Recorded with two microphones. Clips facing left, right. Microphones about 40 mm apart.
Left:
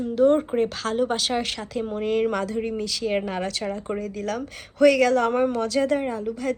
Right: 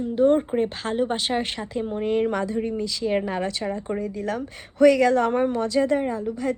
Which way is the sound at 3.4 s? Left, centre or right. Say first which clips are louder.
Right 1 dB; centre.